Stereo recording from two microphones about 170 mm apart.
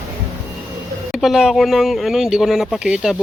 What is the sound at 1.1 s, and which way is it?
Speech, centre (ahead or behind).